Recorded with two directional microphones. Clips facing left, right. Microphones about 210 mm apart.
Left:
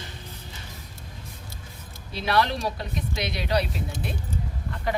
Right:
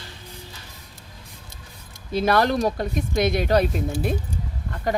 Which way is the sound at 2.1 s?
45° right (ahead or behind).